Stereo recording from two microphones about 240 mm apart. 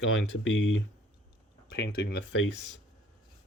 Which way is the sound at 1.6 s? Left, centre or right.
Left.